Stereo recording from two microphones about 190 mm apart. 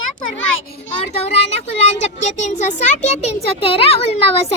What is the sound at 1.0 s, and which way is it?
A child's voice, 35° left (ahead or behind).